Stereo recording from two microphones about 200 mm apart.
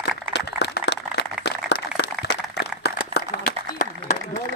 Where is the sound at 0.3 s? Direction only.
60° left (ahead or behind).